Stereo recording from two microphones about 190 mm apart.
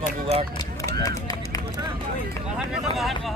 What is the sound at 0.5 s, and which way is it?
Run, 20° left (ahead or behind).